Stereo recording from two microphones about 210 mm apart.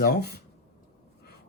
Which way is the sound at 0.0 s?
50° left (ahead or behind).